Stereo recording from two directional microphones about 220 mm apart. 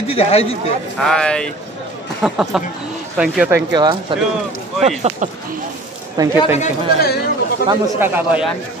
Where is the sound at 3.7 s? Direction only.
20° right (ahead or behind).